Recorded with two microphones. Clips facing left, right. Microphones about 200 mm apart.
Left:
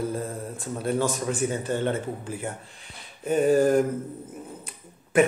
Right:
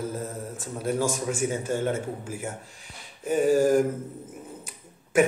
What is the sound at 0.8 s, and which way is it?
Speech, 10° right (ahead or behind).